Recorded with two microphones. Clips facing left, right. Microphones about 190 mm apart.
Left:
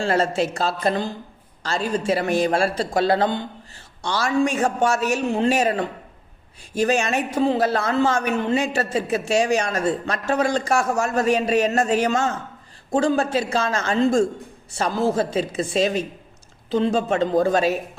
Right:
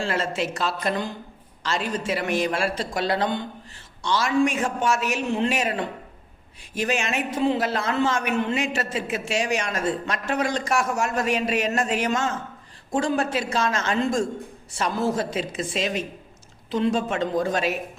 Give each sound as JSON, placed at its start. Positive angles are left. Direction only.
{"t": 0.0, "sound": "a man's voice", "side_deg": 40}